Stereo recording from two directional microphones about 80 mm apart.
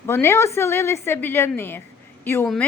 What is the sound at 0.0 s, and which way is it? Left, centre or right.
A woman's voice, left.